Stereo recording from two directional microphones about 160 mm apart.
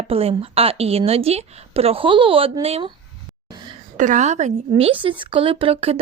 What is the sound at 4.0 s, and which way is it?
A woman's voice, 50° right (ahead or behind).